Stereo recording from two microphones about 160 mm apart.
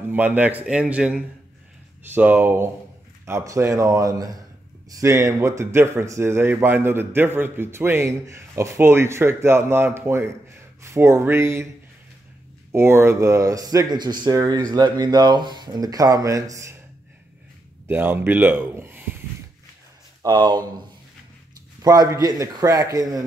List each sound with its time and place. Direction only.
0.1 s speech: 10° right (ahead or behind)
12.7 s speech: 15° right (ahead or behind)
17.8 s speech: 10° right (ahead or behind)
20.2 s speech: 25° right (ahead or behind)
21.8 s speech: 25° right (ahead or behind)